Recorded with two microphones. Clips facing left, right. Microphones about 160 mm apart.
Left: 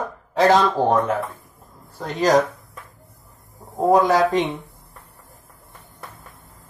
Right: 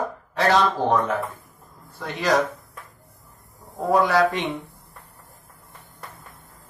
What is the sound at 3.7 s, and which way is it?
Speech, 40° left (ahead or behind).